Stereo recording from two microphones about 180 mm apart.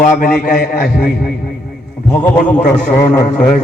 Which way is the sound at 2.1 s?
5° left (ahead or behind).